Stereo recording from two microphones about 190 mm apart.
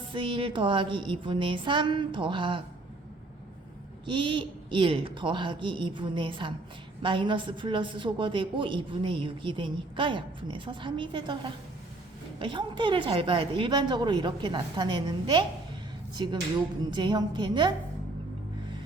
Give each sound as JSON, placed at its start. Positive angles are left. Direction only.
{"t": 0.1, "sound": "a woman's voice", "side_deg": -25}
{"t": 4.0, "sound": "a woman's voice", "side_deg": -25}